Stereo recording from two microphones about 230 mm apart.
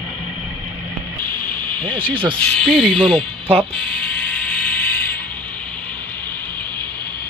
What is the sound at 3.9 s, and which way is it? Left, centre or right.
Ratchet, centre.